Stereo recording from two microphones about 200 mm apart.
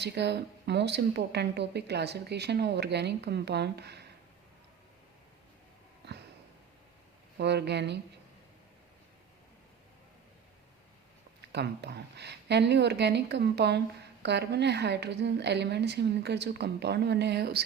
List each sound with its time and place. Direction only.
0.0 s speech: 55° right (ahead or behind)
7.3 s speech: 55° right (ahead or behind)
11.5 s speech: 55° right (ahead or behind)